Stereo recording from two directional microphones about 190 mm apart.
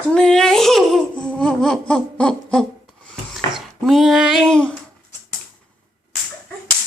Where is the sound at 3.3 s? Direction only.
Centre (ahead or behind).